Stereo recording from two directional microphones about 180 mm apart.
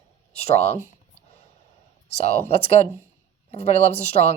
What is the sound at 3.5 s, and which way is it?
Speech, 35° left (ahead or behind).